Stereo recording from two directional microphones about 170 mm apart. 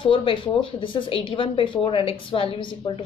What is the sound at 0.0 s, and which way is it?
A woman's voice, 30° left (ahead or behind).